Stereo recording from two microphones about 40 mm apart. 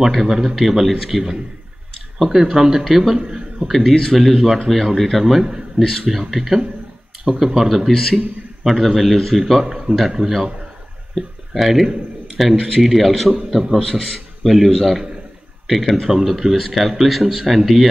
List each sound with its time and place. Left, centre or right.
0.0 s speech: centre
3.2 s a man's voice: centre
3.6 s speech: centre
9.5 s speech: centre
13.7 s speech: centre